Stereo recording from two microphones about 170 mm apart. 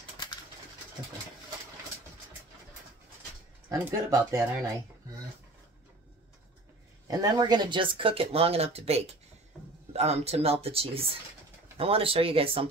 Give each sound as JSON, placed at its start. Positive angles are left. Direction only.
{"t": 3.8, "sound": "speech", "side_deg": -15}
{"t": 7.1, "sound": "speech", "side_deg": -20}